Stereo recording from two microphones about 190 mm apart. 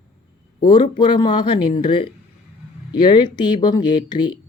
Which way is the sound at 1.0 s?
20° left (ahead or behind).